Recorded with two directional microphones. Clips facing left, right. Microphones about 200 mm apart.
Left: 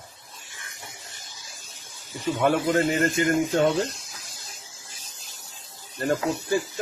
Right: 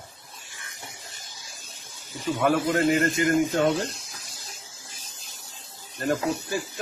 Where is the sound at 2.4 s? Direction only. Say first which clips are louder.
Even; 25° left (ahead or behind).